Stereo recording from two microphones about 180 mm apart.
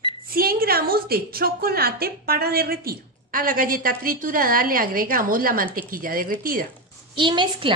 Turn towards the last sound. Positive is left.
turn(degrees=-25)  # may be behind; listen again after turning